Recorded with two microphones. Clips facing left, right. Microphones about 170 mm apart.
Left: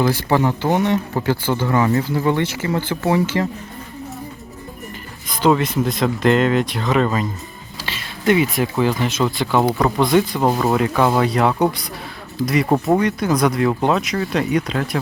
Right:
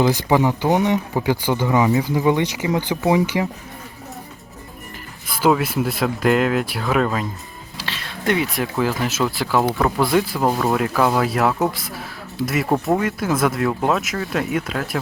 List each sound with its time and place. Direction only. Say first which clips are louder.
0.0 s speech: right 1 dB; 15° right (ahead or behind)
5.3 s speech: left 1 dB; 5° right (ahead or behind)